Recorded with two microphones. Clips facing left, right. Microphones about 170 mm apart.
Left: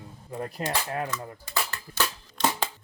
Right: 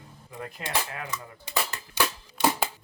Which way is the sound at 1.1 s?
15° right (ahead or behind).